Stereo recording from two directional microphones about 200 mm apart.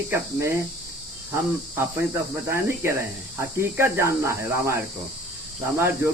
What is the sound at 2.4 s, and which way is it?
Speech, 15° right (ahead or behind).